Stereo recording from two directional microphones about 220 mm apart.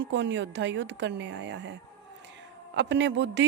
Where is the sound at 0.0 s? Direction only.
55° right (ahead or behind).